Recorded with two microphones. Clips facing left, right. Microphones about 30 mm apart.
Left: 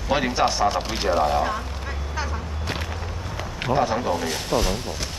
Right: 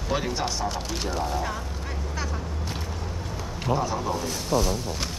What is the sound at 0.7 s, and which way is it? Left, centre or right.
Speech, left.